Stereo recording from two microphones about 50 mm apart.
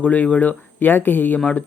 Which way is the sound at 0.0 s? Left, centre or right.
Left.